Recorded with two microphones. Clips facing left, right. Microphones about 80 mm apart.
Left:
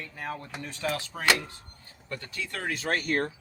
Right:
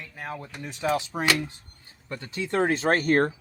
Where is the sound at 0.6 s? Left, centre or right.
Centre.